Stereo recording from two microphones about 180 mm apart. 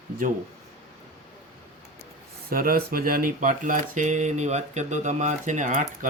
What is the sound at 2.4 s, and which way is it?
Speech, 55° right (ahead or behind).